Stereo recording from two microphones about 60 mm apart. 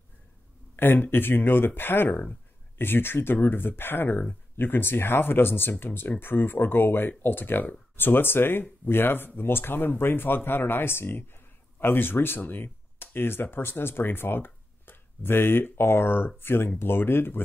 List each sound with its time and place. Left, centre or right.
0.7 s speech: left